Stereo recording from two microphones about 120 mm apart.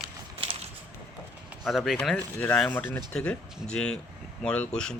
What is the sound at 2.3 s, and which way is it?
Speech, 10° left (ahead or behind).